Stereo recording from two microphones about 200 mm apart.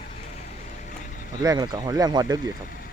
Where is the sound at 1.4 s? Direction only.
20° right (ahead or behind).